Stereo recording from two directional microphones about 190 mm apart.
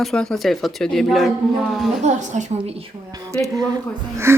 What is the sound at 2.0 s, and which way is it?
Speech, 40° right (ahead or behind).